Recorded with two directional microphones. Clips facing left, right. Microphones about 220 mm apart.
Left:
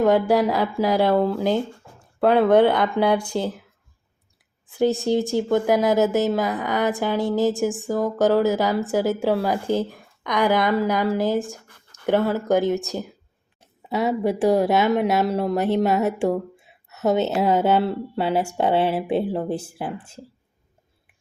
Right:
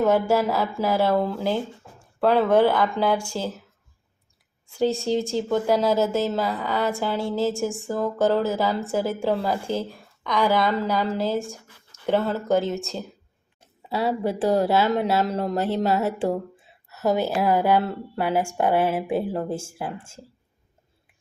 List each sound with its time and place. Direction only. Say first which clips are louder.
0.0 s a woman's voice: left 2 dB; 15° left (ahead or behind)
4.6 s a woman's voice: left 3 dB; 15° left (ahead or behind)
11.4 s speech: left 1 dB; 15° right (ahead or behind)
12.0 s a woman's voice: left 3 dB; 10° left (ahead or behind)